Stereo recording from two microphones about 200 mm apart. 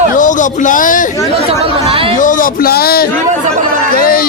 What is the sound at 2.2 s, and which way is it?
A man's voice, 40° left (ahead or behind).